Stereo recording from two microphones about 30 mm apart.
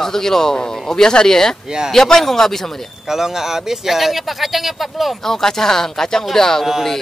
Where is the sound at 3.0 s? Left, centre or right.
Centre.